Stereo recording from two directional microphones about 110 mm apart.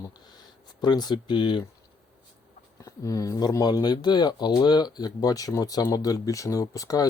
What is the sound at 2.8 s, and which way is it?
Speech, 30° left (ahead or behind).